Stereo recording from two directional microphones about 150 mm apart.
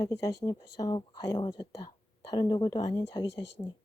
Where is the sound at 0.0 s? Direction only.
20° left (ahead or behind).